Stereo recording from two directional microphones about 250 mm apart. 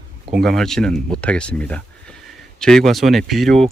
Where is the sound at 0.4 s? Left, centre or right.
Centre.